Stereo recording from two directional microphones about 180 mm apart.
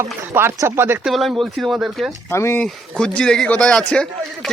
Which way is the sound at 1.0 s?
Centre (ahead or behind).